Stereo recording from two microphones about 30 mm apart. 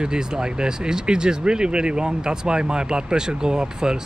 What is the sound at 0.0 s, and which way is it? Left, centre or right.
Speech, right.